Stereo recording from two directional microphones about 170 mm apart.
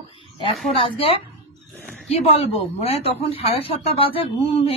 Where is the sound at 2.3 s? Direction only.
35° left (ahead or behind).